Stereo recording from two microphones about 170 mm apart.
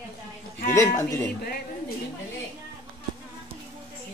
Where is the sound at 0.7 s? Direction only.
20° left (ahead or behind).